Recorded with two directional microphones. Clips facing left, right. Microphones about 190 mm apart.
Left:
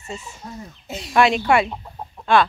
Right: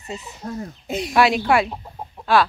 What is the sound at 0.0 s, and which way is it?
Speech, 20° right (ahead or behind).